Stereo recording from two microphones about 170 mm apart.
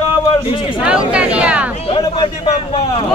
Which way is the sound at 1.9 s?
35° left (ahead or behind).